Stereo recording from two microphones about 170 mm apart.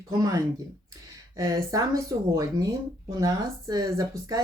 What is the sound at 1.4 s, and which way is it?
A woman's voice, 20° right (ahead or behind).